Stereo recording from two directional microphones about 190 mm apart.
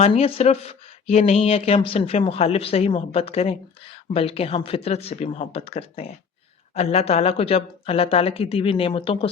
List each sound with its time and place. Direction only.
0.0 s speech: 30° left (ahead or behind)